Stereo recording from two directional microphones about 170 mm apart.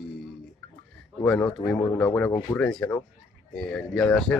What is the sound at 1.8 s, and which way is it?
Speech, 20° left (ahead or behind).